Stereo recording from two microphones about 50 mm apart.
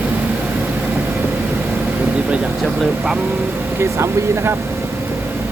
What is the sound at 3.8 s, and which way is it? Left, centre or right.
Speech, right.